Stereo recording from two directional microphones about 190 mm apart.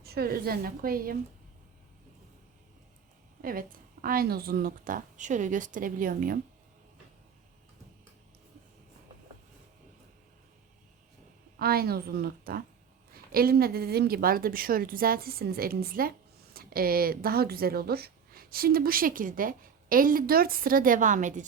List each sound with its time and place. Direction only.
0.0 s a woman's voice: 55° right (ahead or behind)
3.4 s a woman's voice: 50° right (ahead or behind)
11.6 s a woman's voice: 55° right (ahead or behind)